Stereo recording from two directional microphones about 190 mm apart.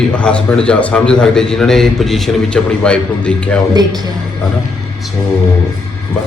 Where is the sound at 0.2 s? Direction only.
5° left (ahead or behind).